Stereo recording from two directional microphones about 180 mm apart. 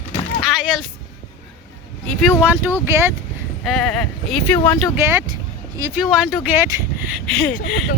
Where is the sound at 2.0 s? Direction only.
5° right (ahead or behind).